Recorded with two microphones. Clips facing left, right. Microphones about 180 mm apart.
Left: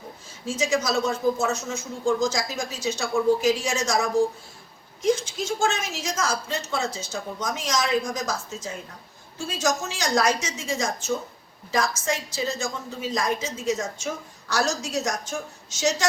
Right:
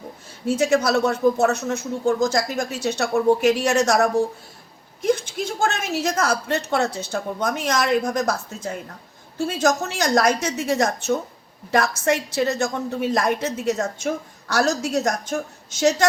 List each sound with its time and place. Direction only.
0.4 s a woman's voice: 60° right (ahead or behind)